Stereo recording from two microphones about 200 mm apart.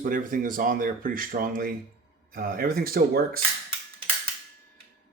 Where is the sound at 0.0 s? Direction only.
40° right (ahead or behind).